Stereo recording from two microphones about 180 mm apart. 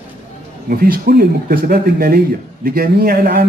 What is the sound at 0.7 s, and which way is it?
Speech, 55° right (ahead or behind).